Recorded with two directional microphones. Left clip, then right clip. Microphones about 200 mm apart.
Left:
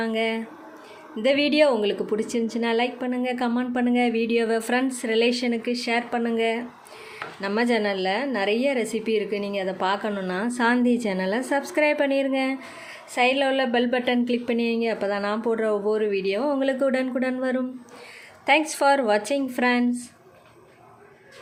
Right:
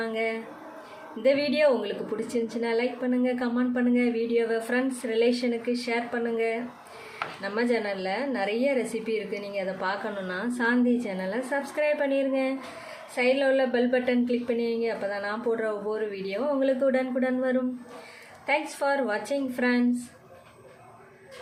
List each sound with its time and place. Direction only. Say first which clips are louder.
0.0 s a woman's voice: left 4 dB; 45° left (ahead or behind)